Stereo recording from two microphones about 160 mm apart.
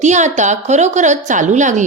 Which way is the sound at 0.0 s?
45° right (ahead or behind).